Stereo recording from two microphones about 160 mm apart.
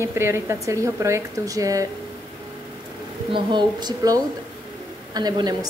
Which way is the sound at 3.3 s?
30° right (ahead or behind).